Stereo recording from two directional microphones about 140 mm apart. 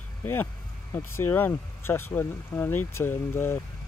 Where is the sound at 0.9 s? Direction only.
15° left (ahead or behind).